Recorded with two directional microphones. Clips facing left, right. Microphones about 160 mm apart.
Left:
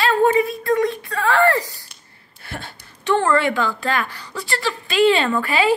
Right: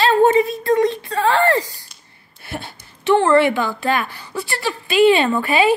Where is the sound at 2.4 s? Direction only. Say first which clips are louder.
Right 3 dB; 10° right (ahead or behind).